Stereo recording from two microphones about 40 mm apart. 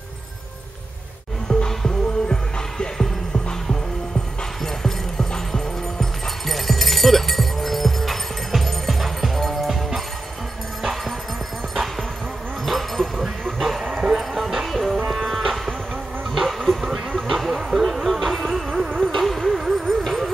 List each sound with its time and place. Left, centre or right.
1.5 s music: left
4.8 s music: centre
9.7 s music: centre
12.6 s a sound: centre
13.2 s music: centre
15.0 s cattle: centre
16.3 s a sound: centre
17.1 s music: centre
18.0 s music: centre
18.8 s music: centre
19.1 s vehicle: centre